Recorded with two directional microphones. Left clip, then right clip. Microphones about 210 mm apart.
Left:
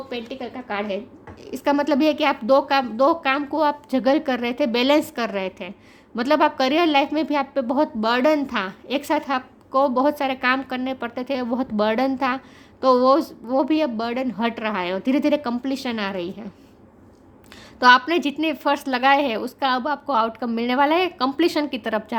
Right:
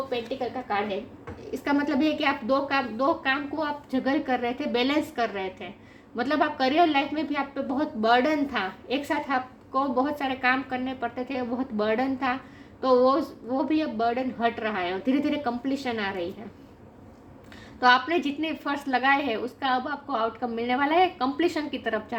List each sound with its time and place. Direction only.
0.1 s a woman's voice: 50° left (ahead or behind)
17.7 s a woman's voice: 50° left (ahead or behind)